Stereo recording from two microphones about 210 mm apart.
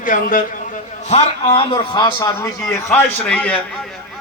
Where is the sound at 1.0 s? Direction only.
30° left (ahead or behind); by 3.6 s 5° left (ahead or behind).